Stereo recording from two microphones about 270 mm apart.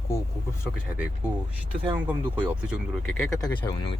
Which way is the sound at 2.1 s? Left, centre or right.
Centre.